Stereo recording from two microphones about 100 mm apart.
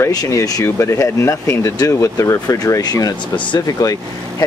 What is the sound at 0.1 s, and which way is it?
Speech, 35° left (ahead or behind).